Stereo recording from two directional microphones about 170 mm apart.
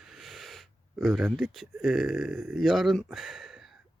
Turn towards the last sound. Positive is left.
turn(degrees=0)  # may be behind; listen again after turning